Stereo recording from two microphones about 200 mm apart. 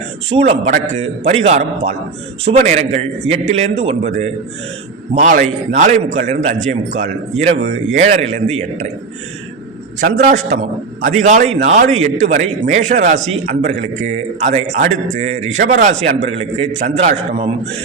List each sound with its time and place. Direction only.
0.3 s a man's voice: 30° right (ahead or behind)
10.0 s a man's voice: 40° right (ahead or behind)